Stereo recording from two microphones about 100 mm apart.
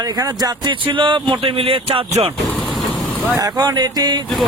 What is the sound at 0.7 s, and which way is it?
Speech, 55° right (ahead or behind).